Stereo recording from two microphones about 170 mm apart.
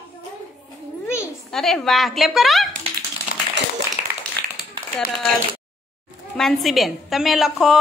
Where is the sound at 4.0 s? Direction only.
45° left (ahead or behind).